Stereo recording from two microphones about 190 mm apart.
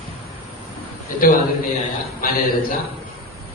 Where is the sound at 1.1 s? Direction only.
45° left (ahead or behind).